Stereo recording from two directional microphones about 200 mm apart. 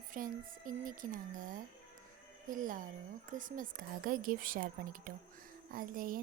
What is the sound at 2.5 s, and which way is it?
Music, 40° right (ahead or behind).